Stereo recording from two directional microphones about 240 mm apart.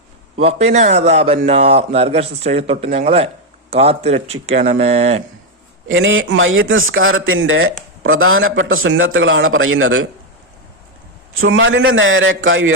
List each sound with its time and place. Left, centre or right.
0.3 s a man's voice: right
5.9 s a man's voice: right
11.3 s a man's voice: right